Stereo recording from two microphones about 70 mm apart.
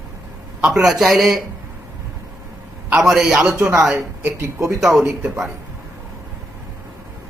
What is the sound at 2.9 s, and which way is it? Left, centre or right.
Speech, centre.